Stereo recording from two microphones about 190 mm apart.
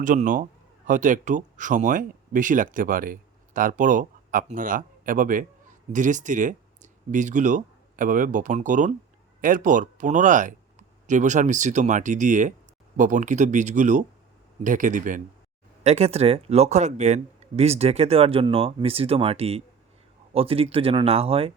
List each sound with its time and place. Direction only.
0.0 s speech: 45° right (ahead or behind)